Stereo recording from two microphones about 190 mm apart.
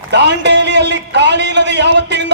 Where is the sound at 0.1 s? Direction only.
65° right (ahead or behind).